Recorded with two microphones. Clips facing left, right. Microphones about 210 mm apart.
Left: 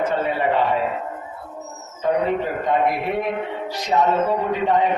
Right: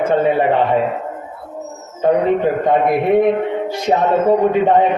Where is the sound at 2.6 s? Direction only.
55° right (ahead or behind).